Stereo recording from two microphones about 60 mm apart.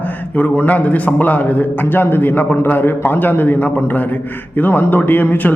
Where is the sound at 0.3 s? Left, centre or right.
Left.